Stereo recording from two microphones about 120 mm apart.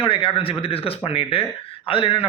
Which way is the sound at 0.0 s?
45° left (ahead or behind).